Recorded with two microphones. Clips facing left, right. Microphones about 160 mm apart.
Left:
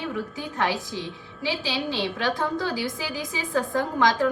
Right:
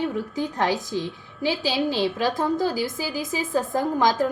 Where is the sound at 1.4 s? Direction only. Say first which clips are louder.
Right 4 dB; 40° right (ahead or behind).